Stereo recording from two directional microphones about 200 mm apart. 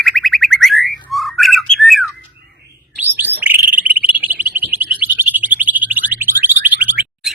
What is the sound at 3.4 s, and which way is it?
Bird, 10° right (ahead or behind).